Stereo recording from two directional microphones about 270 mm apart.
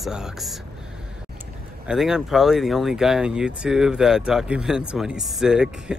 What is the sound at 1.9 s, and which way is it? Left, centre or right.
Speech, centre.